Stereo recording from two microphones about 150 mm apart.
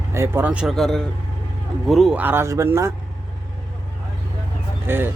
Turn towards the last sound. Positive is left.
turn(degrees=-15)  # may be behind; listen again after turning